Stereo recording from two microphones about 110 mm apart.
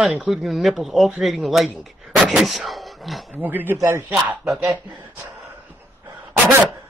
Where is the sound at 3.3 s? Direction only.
15° right (ahead or behind).